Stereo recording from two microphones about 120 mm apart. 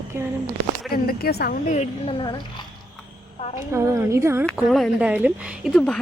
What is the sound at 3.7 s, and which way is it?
Speech, 20° right (ahead or behind).